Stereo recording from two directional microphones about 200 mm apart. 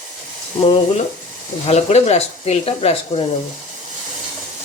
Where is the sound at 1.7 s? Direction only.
35° left (ahead or behind).